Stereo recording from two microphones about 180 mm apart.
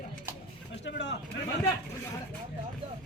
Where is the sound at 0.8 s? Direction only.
75° left (ahead or behind).